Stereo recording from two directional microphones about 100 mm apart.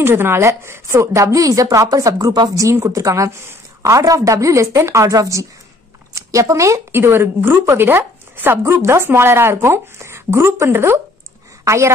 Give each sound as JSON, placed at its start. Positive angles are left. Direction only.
{"t": 0.0, "sound": "a woman's voice", "side_deg": -25}